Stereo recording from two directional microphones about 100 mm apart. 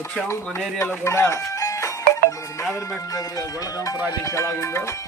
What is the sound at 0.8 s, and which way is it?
Speech, 25° left (ahead or behind).